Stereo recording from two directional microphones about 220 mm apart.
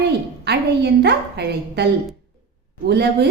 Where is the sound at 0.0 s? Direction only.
50° right (ahead or behind).